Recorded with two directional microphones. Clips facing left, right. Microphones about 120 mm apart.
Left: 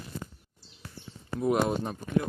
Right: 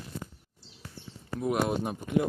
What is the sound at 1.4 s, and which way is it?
Speech, 5° right (ahead or behind).